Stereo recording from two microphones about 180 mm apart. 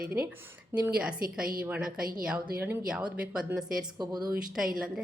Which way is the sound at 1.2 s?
55° right (ahead or behind).